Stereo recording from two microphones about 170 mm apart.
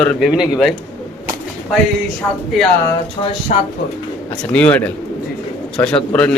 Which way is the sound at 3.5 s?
45° left (ahead or behind).